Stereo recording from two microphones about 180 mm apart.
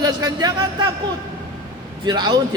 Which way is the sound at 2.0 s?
25° right (ahead or behind).